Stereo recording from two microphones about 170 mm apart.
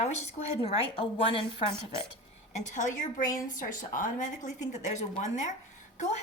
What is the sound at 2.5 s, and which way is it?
A woman's voice, 45° left (ahead or behind).